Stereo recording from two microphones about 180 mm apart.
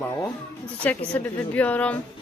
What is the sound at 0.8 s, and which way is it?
A woman's voice, 10° left (ahead or behind).